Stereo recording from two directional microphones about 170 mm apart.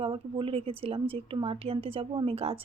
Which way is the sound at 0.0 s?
30° right (ahead or behind).